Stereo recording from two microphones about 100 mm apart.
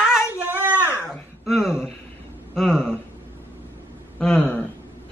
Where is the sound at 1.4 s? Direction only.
Centre (ahead or behind).